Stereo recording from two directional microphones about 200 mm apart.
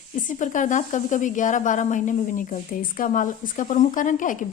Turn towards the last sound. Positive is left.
turn(degrees=40)  # may be behind; listen again after turning